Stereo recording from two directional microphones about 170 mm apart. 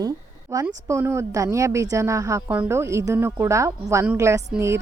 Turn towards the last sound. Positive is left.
turn(degrees=-15)  # may be behind; listen again after turning